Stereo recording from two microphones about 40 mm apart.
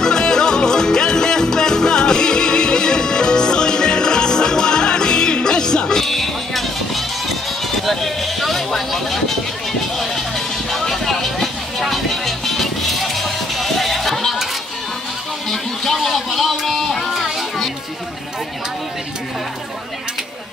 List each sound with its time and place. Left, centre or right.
0.0 s music: centre
6.0 s music: centre
7.8 s a sound: centre
10.7 s music: centre
15.5 s music: centre
16.3 s a sound: centre
17.1 s music: centre